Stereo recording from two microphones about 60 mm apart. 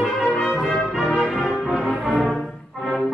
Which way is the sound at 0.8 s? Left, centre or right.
Centre.